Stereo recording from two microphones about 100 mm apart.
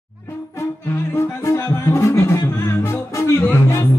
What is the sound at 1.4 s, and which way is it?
Music, 30° left (ahead or behind).